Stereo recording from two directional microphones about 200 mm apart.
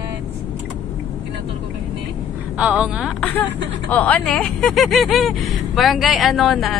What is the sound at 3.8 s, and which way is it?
Speech, 5° left (ahead or behind).